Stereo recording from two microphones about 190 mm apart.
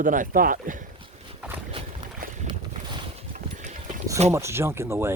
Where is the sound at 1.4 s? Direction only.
10° right (ahead or behind).